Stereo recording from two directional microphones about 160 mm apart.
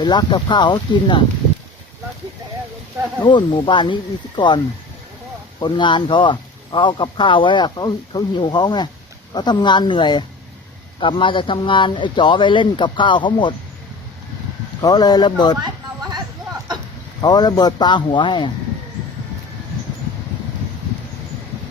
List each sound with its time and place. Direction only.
0.0 s speech: 25° left (ahead or behind)
3.2 s speech: 30° left (ahead or behind)
14.8 s speech: 25° left (ahead or behind)
15.6 s a sound: 25° right (ahead or behind)
17.2 s speech: 25° left (ahead or behind)